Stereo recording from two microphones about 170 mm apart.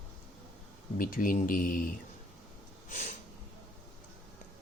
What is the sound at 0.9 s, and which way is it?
Speech, 55° left (ahead or behind).